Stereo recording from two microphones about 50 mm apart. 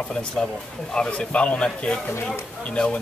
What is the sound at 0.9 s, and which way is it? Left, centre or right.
Speech, left.